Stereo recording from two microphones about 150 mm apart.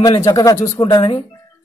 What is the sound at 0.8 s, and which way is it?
Speech, 40° left (ahead or behind).